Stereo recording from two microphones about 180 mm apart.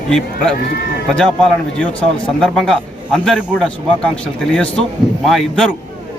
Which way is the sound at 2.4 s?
Centre (ahead or behind).